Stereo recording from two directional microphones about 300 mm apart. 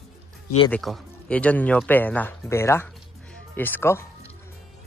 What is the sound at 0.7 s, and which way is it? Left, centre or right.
Speech, centre.